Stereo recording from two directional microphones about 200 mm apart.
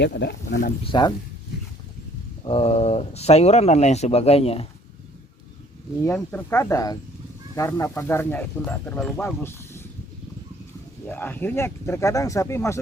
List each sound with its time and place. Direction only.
0.0 s speech: 60° left (ahead or behind)
0.9 s speech: 20° left (ahead or behind)
2.4 s speech: 30° left (ahead or behind)
6.0 s speech: 10° left (ahead or behind)
11.0 s speech: 10° left (ahead or behind)